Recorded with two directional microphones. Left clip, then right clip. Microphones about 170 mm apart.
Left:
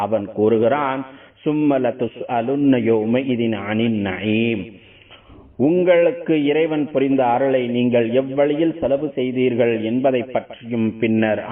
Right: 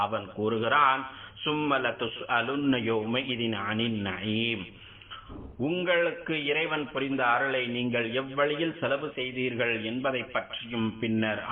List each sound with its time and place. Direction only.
0.0 s a man's voice: 45° left (ahead or behind)
1.5 s a man's voice: 30° left (ahead or behind)
5.5 s a man's voice: 35° left (ahead or behind)